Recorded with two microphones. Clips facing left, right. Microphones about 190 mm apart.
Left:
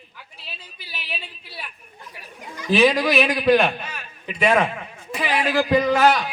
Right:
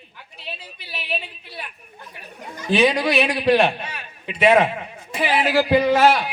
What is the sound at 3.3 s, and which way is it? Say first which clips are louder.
A man's voice: even; 30° right (ahead or behind).